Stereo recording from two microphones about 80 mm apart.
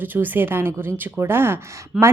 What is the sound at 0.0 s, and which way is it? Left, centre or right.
Speech, right.